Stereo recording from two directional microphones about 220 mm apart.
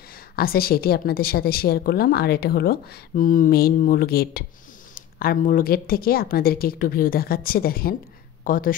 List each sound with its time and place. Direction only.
0.4 s a woman's voice: 45° left (ahead or behind)